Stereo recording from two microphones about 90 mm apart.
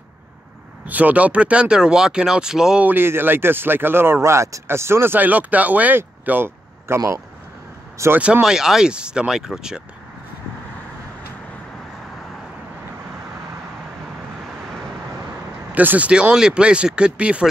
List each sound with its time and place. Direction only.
0.8 s speech: 15° right (ahead or behind)
2.9 s speech: 25° right (ahead or behind)
8.2 s speech: 10° right (ahead or behind)
15.7 s speech: 20° right (ahead or behind)